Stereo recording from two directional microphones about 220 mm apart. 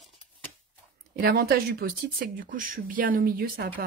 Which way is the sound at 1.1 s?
40° right (ahead or behind).